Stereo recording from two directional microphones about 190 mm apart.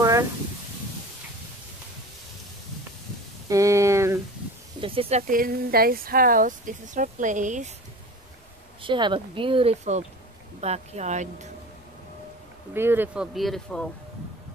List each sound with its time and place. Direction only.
0.0 s a sound: 15° right (ahead or behind)
3.4 s a sound: 15° right (ahead or behind)
4.7 s speech: 30° right (ahead or behind)
5.3 s speech: 50° right (ahead or behind)
8.8 s speech: 25° right (ahead or behind)
12.7 s speech: 10° right (ahead or behind)